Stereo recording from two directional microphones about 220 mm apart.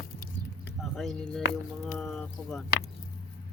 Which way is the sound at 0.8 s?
Centre (ahead or behind).